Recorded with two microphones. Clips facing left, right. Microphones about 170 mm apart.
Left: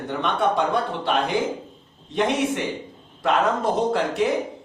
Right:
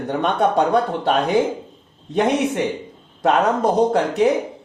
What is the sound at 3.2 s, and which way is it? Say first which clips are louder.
Speech: right 4 dB; 45° right (ahead or behind).